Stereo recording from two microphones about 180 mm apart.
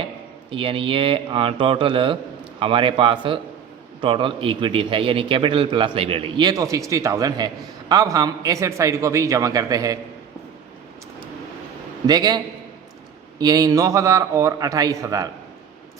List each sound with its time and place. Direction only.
0.5 s a man's voice: 30° right (ahead or behind)
12.0 s a man's voice: 20° right (ahead or behind)
13.4 s a man's voice: 20° right (ahead or behind)